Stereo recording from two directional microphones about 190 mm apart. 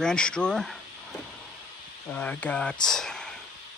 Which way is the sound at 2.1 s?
10° left (ahead or behind).